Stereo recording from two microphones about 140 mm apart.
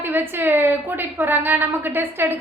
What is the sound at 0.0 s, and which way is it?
A woman's voice, 15° right (ahead or behind).